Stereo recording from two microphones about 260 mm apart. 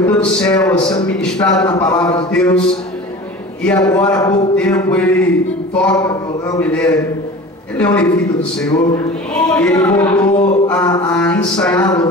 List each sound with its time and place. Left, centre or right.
0.2 s speech: centre
3.6 s speech: centre
9.3 s speech: centre
10.3 s mantra: left
10.7 s speech: centre